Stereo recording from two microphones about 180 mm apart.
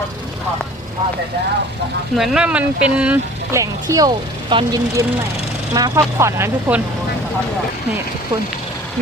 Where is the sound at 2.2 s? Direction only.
5° right (ahead or behind).